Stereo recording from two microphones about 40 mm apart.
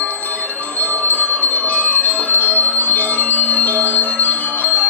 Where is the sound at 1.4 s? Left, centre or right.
Left.